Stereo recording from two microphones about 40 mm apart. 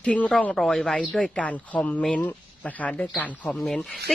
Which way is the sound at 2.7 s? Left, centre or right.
Left.